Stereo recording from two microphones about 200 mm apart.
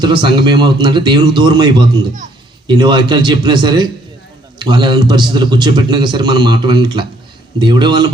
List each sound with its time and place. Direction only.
0.0 s a man's voice: 25° right (ahead or behind)